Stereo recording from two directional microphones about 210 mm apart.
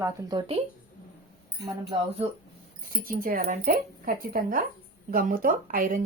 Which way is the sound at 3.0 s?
45° right (ahead or behind).